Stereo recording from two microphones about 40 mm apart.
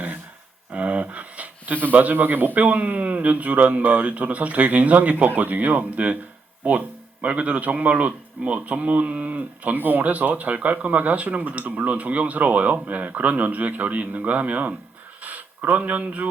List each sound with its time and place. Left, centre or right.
0.7 s a sound: right
1.9 s a man's voice: right
2.6 s speech: right